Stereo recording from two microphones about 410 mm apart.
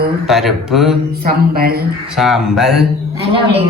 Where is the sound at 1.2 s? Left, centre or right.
Right.